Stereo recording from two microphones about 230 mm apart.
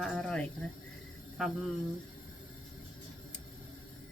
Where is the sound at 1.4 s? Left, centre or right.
Centre.